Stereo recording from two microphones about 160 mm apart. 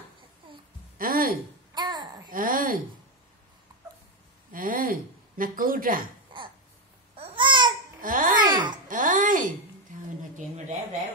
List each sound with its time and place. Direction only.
0.9 s a sound: 65° right (ahead or behind)
1.8 s babbling: 25° right (ahead or behind)
2.3 s speech: 60° right (ahead or behind)
4.5 s speech: 60° right (ahead or behind)
6.3 s a sound: 30° right (ahead or behind)
7.2 s babbling: 35° right (ahead or behind)
8.0 s babbling: 60° right (ahead or behind)
8.4 s babbling: 30° right (ahead or behind)
8.8 s a sound: 55° right (ahead or behind)